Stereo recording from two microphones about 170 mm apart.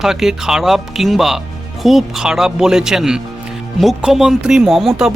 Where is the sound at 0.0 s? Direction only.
Centre (ahead or behind).